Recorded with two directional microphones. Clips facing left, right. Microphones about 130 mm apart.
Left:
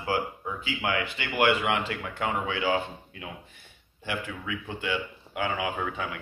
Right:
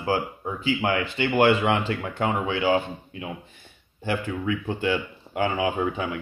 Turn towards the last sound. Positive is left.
turn(degrees=-30)  # may be behind; listen again after turning